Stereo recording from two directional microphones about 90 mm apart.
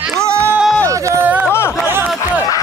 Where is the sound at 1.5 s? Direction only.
30° left (ahead or behind).